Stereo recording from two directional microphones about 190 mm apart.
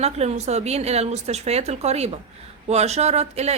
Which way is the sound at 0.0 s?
35° right (ahead or behind).